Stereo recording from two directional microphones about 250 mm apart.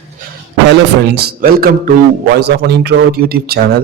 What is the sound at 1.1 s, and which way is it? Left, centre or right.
A man's voice, right.